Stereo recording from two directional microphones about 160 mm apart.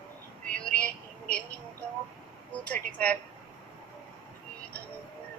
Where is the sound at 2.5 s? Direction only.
10° left (ahead or behind).